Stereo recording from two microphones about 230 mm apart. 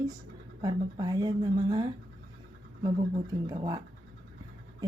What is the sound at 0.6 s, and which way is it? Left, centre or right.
Speech, centre.